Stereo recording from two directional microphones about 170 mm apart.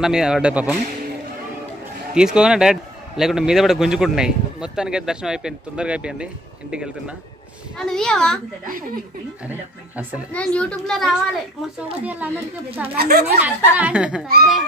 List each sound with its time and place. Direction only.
0.0 s a man's voice: 5° right (ahead or behind)
2.1 s a man's voice: 5° right (ahead or behind)
9.5 s a woman's voice: 10° right (ahead or behind)
10.3 s a man's voice: 5° left (ahead or behind); by 12.3 s 10° right (ahead or behind)
12.9 s a woman's voice: 65° right (ahead or behind)
13.4 s a woman's voice: 10° right (ahead or behind)